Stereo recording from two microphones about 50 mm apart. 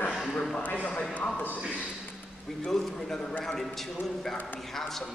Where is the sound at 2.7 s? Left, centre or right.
Centre.